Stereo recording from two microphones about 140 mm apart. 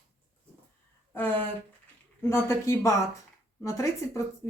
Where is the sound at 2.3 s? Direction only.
20° left (ahead or behind).